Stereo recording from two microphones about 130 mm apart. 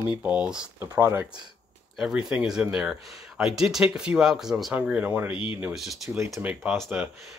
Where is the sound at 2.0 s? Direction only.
5° right (ahead or behind).